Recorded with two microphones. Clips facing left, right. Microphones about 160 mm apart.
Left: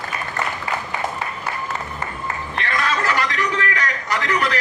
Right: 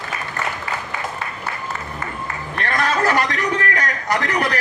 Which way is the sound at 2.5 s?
50° right (ahead or behind).